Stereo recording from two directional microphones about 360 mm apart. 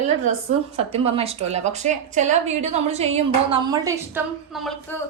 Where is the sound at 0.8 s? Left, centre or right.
Centre.